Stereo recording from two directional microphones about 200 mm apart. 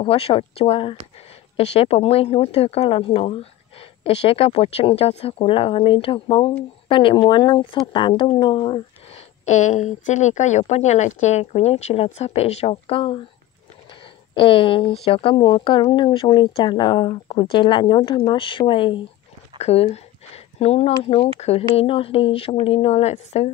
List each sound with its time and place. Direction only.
0.0 s speech: 30° left (ahead or behind)
14.3 s speech: 25° left (ahead or behind)